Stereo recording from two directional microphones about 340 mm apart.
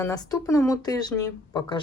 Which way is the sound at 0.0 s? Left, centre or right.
Centre.